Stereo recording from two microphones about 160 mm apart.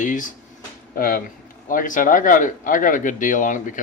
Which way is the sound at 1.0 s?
65° left (ahead or behind).